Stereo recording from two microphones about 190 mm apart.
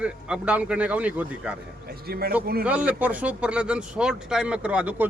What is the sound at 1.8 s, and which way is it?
Speech, 55° right (ahead or behind).